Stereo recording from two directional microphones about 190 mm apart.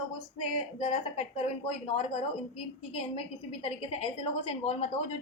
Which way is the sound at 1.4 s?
30° left (ahead or behind).